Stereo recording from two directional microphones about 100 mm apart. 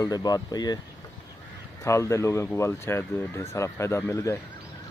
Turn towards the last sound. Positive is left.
turn(degrees=30)  # may be behind; listen again after turning